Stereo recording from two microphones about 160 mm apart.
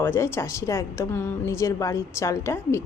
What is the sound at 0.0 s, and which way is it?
A woman's voice, 15° left (ahead or behind).